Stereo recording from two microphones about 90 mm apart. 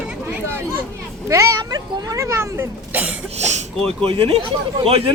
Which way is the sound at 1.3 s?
35° right (ahead or behind).